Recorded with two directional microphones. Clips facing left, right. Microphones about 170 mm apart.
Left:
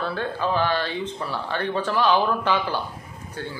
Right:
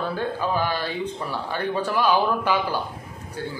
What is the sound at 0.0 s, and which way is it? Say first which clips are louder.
Speech: even; 15° right (ahead or behind).